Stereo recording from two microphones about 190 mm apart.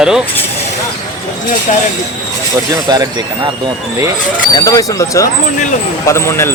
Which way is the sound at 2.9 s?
20° right (ahead or behind).